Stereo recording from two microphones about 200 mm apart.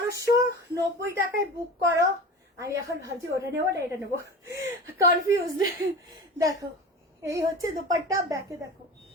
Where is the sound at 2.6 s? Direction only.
15° right (ahead or behind).